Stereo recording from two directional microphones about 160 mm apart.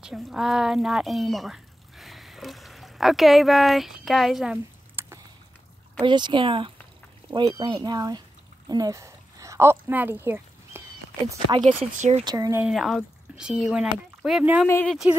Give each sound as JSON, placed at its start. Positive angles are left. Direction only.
{"t": 0.0, "sound": "speech", "side_deg": -5}
{"t": 5.0, "sound": "a sound", "side_deg": -15}
{"t": 5.9, "sound": "speech", "side_deg": -30}
{"t": 11.3, "sound": "speech", "side_deg": -30}
{"t": 11.6, "sound": "speech", "side_deg": -45}
{"t": 12.3, "sound": "speech", "side_deg": -20}
{"t": 12.6, "sound": "speech", "side_deg": 0}